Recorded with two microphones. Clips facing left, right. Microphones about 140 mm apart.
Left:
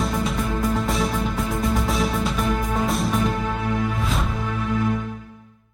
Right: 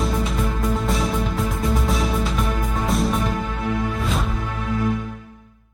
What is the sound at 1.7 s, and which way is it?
Music, centre (ahead or behind).